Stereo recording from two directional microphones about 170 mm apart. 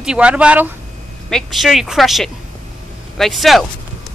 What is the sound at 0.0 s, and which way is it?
Speech, 5° right (ahead or behind).